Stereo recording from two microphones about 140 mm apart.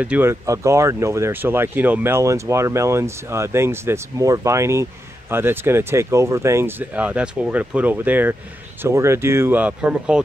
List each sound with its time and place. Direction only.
0.0 s speech: 15° right (ahead or behind)